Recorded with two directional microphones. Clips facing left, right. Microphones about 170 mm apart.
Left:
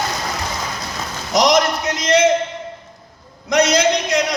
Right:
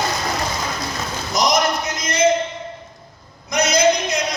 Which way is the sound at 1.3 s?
85° left.